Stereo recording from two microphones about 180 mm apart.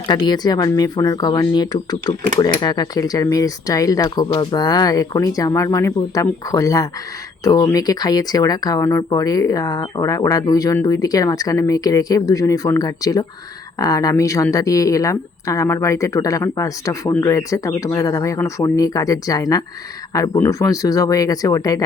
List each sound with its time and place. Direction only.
0.1 s a woman's voice: 25° left (ahead or behind)